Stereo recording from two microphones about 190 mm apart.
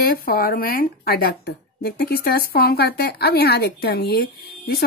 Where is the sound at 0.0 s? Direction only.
55° left (ahead or behind).